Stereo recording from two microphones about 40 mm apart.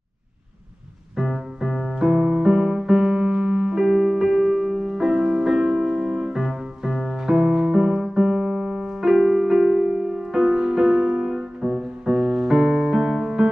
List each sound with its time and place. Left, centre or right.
1.1 s music: centre
2.0 s music: centre
6.3 s music: centre
7.3 s music: right